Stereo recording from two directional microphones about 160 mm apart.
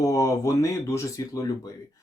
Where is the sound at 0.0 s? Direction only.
20° left (ahead or behind).